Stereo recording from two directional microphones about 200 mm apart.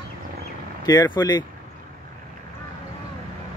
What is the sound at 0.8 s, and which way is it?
Speech, 20° left (ahead or behind).